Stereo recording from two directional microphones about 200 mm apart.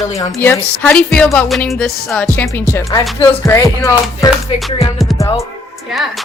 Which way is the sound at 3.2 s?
15° left (ahead or behind).